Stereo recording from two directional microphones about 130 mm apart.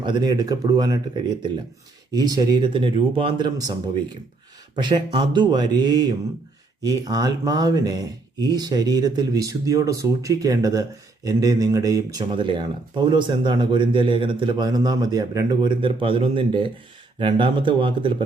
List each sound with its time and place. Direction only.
0.0 s speech: 35° right (ahead or behind)
2.1 s speech: 30° right (ahead or behind)
12.3 s speech: 40° right (ahead or behind)